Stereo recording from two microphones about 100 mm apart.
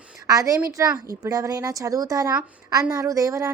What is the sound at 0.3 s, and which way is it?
A woman's voice, 35° right (ahead or behind).